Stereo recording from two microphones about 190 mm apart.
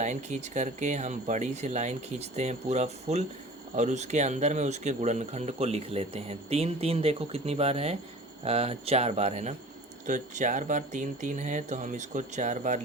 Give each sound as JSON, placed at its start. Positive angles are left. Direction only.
{"t": 0.0, "sound": "speech", "side_deg": -40}